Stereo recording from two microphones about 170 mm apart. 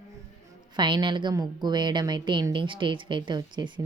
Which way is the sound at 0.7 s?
25° right (ahead or behind).